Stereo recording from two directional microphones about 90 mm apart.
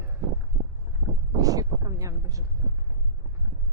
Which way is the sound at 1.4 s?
40° right (ahead or behind).